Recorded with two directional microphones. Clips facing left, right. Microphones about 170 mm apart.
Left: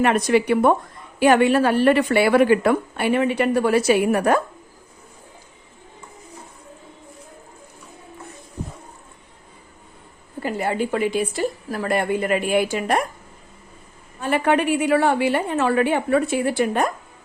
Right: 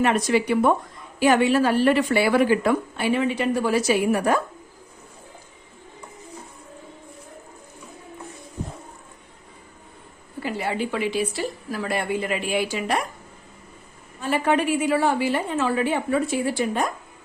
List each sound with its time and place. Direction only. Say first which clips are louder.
0.0 s a woman's voice: left 3 dB; 60° left (ahead or behind)
10.4 s speech: left 3 dB; 45° left (ahead or behind)
14.2 s a woman's voice: left 2 dB; 60° left (ahead or behind)